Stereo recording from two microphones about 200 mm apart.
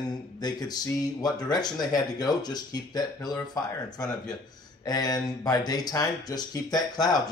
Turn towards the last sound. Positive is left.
turn(degrees=20)  # may be behind; listen again after turning